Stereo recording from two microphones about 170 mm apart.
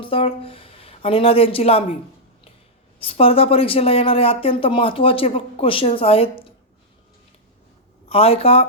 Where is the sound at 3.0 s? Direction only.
35° left (ahead or behind).